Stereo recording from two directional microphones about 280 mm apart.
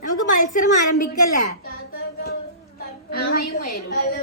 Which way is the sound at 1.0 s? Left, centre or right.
Left.